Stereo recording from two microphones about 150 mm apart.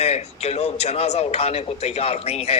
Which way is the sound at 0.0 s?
45° left (ahead or behind).